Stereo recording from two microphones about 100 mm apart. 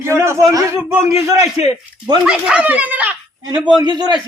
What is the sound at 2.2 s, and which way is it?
Speech, 10° right (ahead or behind).